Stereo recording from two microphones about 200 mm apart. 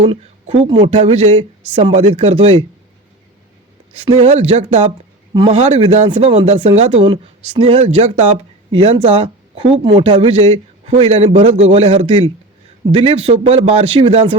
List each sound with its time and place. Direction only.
0.1 s speech: 30° right (ahead or behind)
3.9 s speech: 30° right (ahead or behind)